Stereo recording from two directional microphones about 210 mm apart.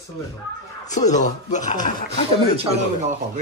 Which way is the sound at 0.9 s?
35° left (ahead or behind).